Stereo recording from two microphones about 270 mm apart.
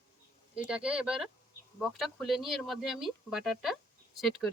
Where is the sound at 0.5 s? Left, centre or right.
Centre.